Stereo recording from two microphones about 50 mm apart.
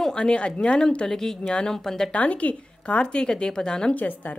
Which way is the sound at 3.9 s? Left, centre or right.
Left.